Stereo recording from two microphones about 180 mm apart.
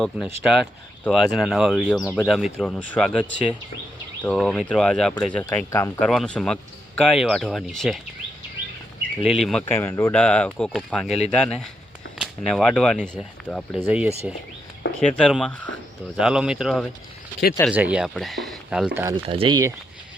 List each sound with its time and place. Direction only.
0.0 s speech: 5° right (ahead or behind); by 5.9 s 15° left (ahead or behind)
6.0 s speech: 5° left (ahead or behind)
9.4 s speech: 5° left (ahead or behind)
15.0 s speech: 5° left (ahead or behind)
19.0 s speech: 30° right (ahead or behind)